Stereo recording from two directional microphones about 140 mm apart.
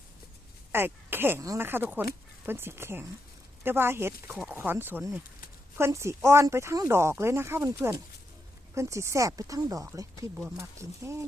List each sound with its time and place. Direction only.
0.7 s speech: 15° right (ahead or behind)